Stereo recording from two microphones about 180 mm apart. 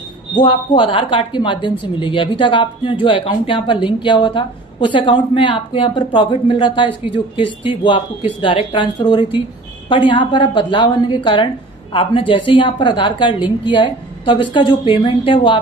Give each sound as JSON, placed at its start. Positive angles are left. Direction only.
{"t": 0.4, "sound": "speech", "side_deg": 25}